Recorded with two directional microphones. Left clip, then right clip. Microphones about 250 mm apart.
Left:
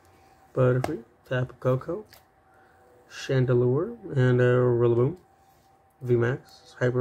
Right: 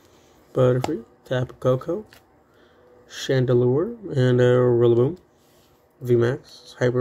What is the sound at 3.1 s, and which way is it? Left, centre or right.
Speech, centre.